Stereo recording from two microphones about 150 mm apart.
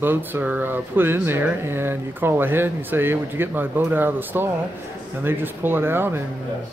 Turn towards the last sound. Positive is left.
turn(degrees=-15)  # may be behind; listen again after turning